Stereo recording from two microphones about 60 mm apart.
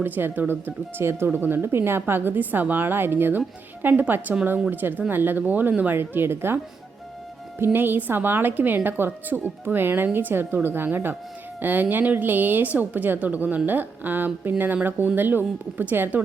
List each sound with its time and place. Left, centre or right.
0.0 s a woman's voice: right
6.0 s a woman's voice: right
7.6 s a woman's voice: right